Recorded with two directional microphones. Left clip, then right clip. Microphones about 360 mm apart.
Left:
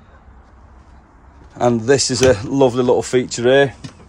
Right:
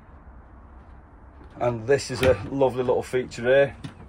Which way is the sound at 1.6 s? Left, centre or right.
Left.